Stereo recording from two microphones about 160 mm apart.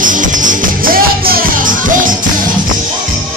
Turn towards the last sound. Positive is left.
turn(degrees=-60)  # may be behind; listen again after turning